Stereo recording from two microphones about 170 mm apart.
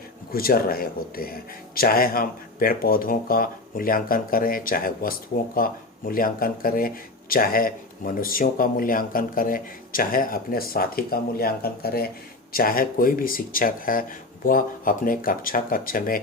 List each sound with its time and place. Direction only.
0.3 s speech: 60° left (ahead or behind)